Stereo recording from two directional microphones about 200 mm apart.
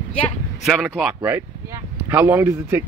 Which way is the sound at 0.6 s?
Centre (ahead or behind).